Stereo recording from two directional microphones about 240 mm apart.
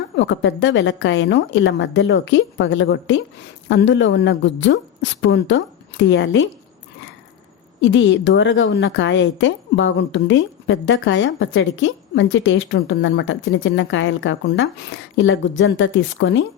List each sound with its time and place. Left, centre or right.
0.2 s a woman's voice: left
7.8 s a woman's voice: left